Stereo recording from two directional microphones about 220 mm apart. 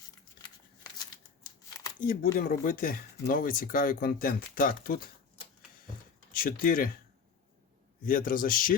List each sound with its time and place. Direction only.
1.5 s crumpling: 15° left (ahead or behind)
2.0 s speech: 40° left (ahead or behind)
6.3 s speech: 40° left (ahead or behind)
8.0 s speech: 40° left (ahead or behind)